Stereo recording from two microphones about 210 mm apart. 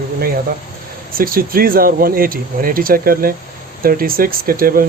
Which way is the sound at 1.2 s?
45° right (ahead or behind).